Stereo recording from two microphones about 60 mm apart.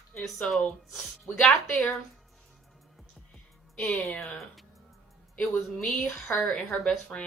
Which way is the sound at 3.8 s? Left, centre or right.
Centre.